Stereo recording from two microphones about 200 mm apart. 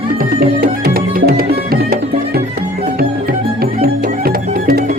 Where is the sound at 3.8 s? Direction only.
50° right (ahead or behind).